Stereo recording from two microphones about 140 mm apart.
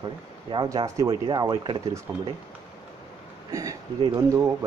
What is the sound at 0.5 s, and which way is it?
Speech, 35° right (ahead or behind).